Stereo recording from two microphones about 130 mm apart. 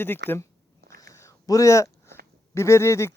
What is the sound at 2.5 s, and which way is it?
Speech, 20° left (ahead or behind).